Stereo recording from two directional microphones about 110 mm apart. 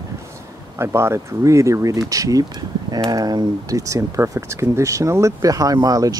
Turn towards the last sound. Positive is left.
turn(degrees=-35)  # may be behind; listen again after turning